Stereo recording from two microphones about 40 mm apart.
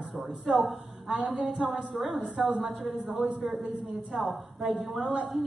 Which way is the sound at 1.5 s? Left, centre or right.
Right.